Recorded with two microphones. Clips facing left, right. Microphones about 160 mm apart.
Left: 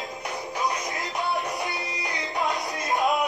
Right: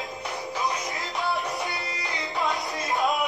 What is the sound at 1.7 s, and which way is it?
Music, 20° left (ahead or behind).